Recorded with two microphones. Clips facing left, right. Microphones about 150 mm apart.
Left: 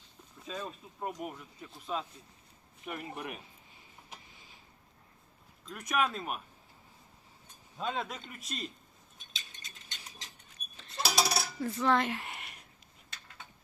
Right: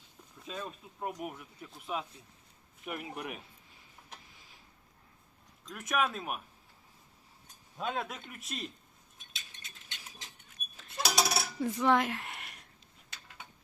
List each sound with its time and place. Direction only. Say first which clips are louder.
0.4 s speech: left 1 dB; 5° left (ahead or behind)
5.6 s speech: even; centre (ahead or behind)
7.8 s speech: even; centre (ahead or behind)
9.1 s a sound: left 1 dB; 5° right (ahead or behind)
11.6 s cutlery: right 1 dB; 15° right (ahead or behind)
12.0 s a sound: left 1 dB; centre (ahead or behind)